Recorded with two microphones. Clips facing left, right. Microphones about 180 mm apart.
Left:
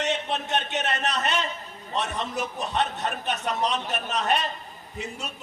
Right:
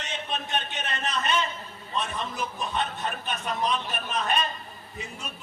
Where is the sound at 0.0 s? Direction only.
70° left (ahead or behind).